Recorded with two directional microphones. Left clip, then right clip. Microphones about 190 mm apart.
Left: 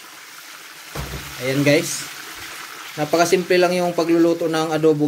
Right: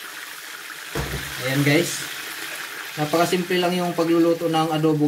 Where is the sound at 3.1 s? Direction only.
55° left (ahead or behind).